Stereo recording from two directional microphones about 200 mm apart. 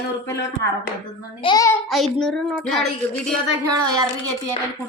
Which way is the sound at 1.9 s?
Centre (ahead or behind).